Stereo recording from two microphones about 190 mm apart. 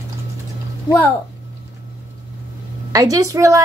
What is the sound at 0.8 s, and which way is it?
Speech, 10° left (ahead or behind).